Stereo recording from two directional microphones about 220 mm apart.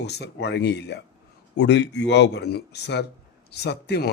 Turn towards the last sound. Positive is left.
turn(degrees=50)  # may be behind; listen again after turning